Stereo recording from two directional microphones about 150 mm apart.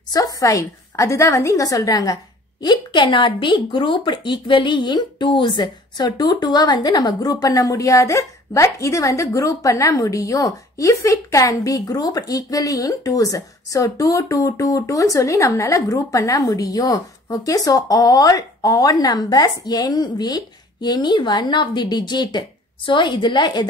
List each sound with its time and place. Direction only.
0.1 s speech: 25° left (ahead or behind)